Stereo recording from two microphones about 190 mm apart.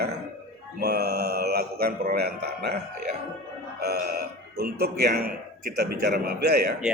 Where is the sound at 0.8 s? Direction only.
55° right (ahead or behind).